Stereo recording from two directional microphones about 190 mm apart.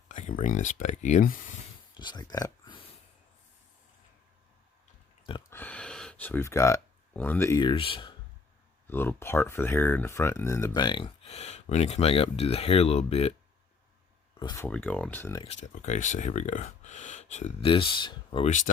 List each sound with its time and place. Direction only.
0.1 s speech: 40° left (ahead or behind)
2.0 s speech: 20° left (ahead or behind)
5.5 s speech: 10° left (ahead or behind); by 8.1 s 25° left (ahead or behind)
8.9 s speech: 10° left (ahead or behind); by 13.3 s 35° left (ahead or behind)
14.5 s speech: 10° left (ahead or behind)
15.4 s speech: 40° left (ahead or behind)